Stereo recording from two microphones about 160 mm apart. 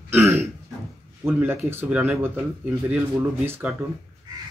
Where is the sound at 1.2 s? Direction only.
15° right (ahead or behind).